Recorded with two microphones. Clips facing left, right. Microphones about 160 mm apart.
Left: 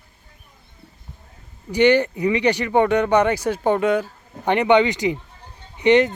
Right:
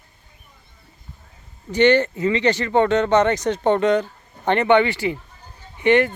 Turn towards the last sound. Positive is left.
turn(degrees=20)  # may be behind; listen again after turning